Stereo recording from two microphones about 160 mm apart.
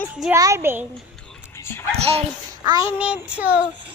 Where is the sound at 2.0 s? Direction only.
40° right (ahead or behind).